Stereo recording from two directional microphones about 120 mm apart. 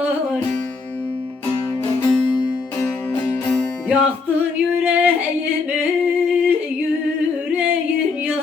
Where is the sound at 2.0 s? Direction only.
30° left (ahead or behind).